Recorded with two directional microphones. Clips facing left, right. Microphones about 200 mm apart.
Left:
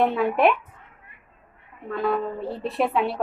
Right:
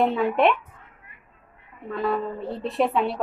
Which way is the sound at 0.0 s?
Centre (ahead or behind).